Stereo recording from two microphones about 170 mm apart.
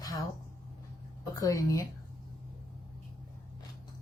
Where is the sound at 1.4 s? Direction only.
20° left (ahead or behind).